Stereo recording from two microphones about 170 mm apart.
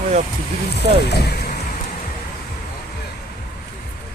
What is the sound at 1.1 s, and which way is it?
Speech, 70° left (ahead or behind).